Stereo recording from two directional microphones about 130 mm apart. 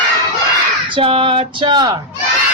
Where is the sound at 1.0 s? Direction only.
45° right (ahead or behind).